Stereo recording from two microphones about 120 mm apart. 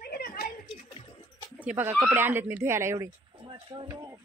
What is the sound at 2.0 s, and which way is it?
Speech, 15° right (ahead or behind).